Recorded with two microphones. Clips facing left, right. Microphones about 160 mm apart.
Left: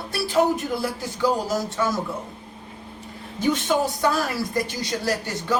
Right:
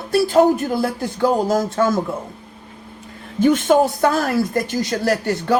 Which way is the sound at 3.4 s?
50° right (ahead or behind).